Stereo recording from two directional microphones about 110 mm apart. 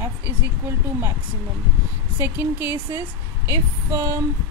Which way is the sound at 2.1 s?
20° right (ahead or behind).